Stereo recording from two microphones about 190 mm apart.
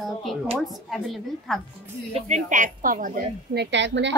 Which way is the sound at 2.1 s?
35° right (ahead or behind).